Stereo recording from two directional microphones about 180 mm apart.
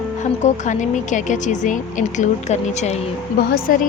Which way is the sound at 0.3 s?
40° left (ahead or behind).